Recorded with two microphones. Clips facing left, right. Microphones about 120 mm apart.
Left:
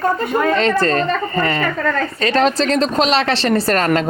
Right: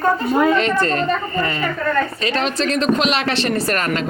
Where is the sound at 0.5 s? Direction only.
35° left (ahead or behind).